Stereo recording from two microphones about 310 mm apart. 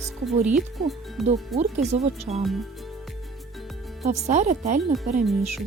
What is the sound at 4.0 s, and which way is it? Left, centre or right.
Speech, right.